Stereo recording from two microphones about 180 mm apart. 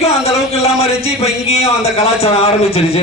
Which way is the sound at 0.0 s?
35° left (ahead or behind).